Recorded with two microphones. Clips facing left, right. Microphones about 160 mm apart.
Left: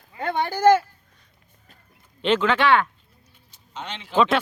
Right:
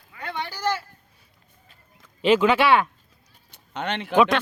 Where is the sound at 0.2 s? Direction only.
50° left (ahead or behind).